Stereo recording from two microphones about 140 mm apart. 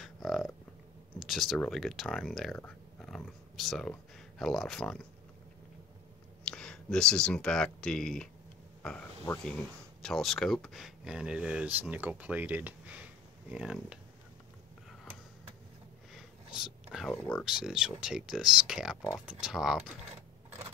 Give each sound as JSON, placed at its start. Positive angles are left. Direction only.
{"t": 0.0, "sound": "a sound", "side_deg": 0}
{"t": 1.2, "sound": "speech", "side_deg": 0}
{"t": 6.4, "sound": "speech", "side_deg": 5}
{"t": 9.3, "sound": "speech", "side_deg": 25}
{"t": 10.0, "sound": "speech", "side_deg": 0}
{"t": 16.5, "sound": "speech", "side_deg": -5}
{"t": 17.1, "sound": "speech", "side_deg": 10}
{"t": 17.5, "sound": "speech", "side_deg": -5}